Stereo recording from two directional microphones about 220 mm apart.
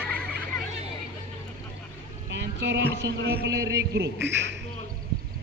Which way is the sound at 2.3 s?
55° right (ahead or behind).